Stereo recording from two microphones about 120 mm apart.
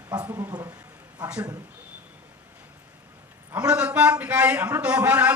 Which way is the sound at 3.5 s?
10° right (ahead or behind).